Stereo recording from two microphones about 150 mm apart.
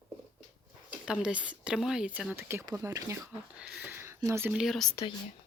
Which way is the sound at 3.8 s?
15° right (ahead or behind).